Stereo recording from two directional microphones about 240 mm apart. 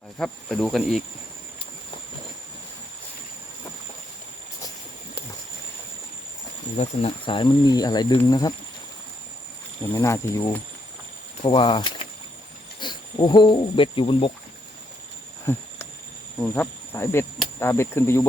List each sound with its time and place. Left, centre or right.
0.2 s speech: centre
6.7 s speech: left
9.9 s speech: centre
16.4 s speech: centre